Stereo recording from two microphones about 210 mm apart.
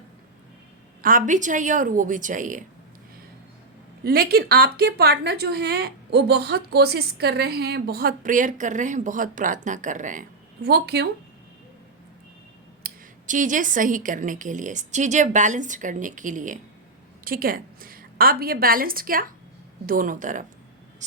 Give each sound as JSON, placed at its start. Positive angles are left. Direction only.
{"t": 1.0, "sound": "a woman's voice", "side_deg": -40}
{"t": 4.0, "sound": "a woman's voice", "side_deg": -45}
{"t": 12.8, "sound": "a woman's voice", "side_deg": -40}